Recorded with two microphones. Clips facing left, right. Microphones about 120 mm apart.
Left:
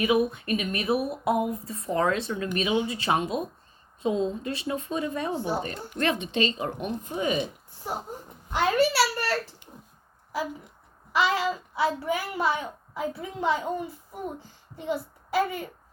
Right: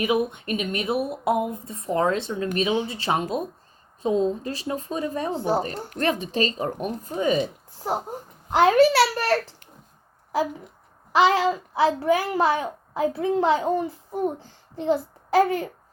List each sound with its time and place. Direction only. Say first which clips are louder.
0.0 s a woman's voice: even; 25° right (ahead or behind)
8.7 s a child's voice: right 6 dB; 90° right
11.1 s a child's voice: right 6 dB; 90° right; by 13.9 s 70° right (ahead or behind)
14.1 s a woman's voice: right 9 dB; 35° right (ahead or behind)
15.4 s a child's voice: right 6 dB; 90° right